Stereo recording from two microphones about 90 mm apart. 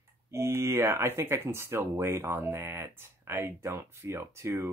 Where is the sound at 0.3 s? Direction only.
30° right (ahead or behind).